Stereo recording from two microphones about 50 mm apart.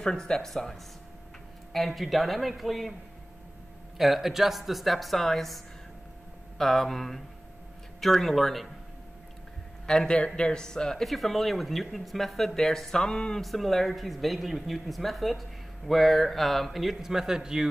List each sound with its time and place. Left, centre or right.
0.0 s a man's voice: centre
4.0 s speech: centre
6.6 s speech: centre
9.8 s a man's voice: centre
13.4 s a man's voice: centre